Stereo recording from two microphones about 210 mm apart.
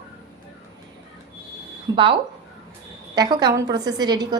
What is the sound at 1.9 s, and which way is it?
A woman's voice, 25° right (ahead or behind).